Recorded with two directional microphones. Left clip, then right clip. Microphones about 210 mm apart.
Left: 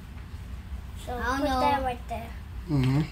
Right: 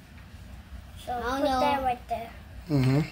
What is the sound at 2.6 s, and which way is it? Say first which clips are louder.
Speech: right 2 dB; 50° right (ahead or behind).